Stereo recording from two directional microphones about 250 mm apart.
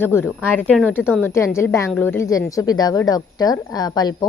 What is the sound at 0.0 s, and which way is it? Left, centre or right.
A woman's voice, centre.